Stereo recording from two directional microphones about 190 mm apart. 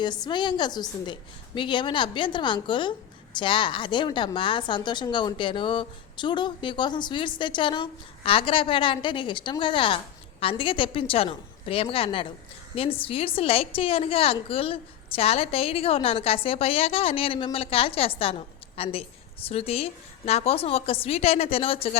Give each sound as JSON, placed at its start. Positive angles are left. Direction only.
{"t": 0.0, "sound": "a woman's voice", "side_deg": 25}